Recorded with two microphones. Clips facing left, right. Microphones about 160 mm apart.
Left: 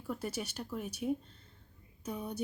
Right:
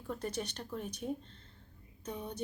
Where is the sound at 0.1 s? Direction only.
10° left (ahead or behind).